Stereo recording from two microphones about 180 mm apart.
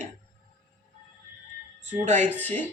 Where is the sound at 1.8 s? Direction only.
40° right (ahead or behind).